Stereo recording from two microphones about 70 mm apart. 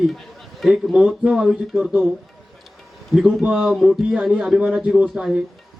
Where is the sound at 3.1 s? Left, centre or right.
Centre.